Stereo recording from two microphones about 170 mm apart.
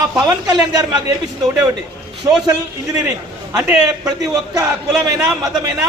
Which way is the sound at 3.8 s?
20° right (ahead or behind).